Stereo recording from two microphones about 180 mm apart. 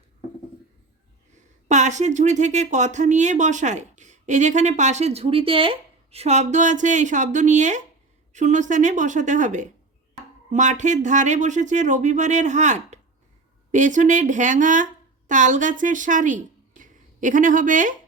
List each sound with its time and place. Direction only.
1.6 s a woman's voice: 40° right (ahead or behind)